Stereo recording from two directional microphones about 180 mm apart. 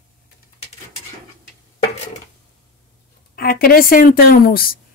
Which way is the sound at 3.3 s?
60° left (ahead or behind).